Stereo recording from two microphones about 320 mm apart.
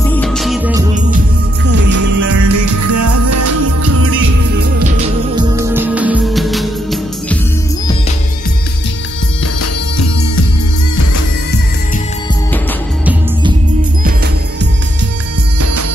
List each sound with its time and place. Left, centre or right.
0.1 s music: centre
1.7 s music: right
5.3 s music: centre
9.6 s music: left